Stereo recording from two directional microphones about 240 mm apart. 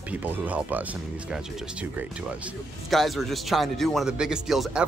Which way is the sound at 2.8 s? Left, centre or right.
Centre.